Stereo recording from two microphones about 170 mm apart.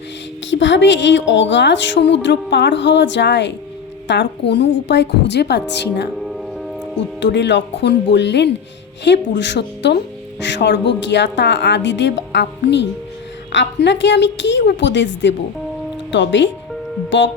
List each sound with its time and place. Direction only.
0.5 s a woman's voice: 90° left
7.2 s a woman's voice: 90° left